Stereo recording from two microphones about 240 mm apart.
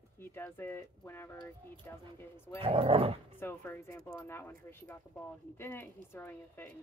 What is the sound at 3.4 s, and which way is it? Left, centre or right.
Speech, centre.